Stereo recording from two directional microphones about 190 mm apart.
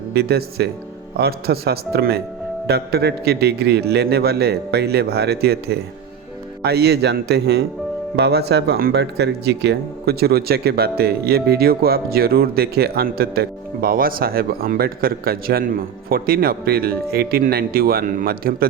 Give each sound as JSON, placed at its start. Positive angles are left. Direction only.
{"t": 0.1, "sound": "a man's voice", "side_deg": -55}